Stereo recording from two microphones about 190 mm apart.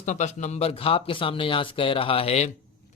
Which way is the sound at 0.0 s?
40° left (ahead or behind).